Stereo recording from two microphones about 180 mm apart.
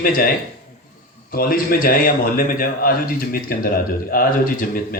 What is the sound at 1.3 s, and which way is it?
A man's voice, 55° left (ahead or behind).